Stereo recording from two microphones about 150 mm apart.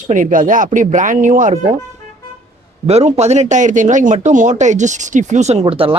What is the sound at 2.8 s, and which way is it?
Speech, 45° right (ahead or behind).